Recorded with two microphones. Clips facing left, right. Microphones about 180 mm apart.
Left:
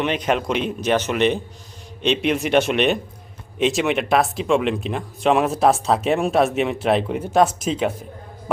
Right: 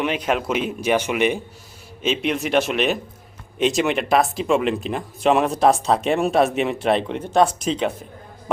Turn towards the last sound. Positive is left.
turn(degrees=5)  # may be behind; listen again after turning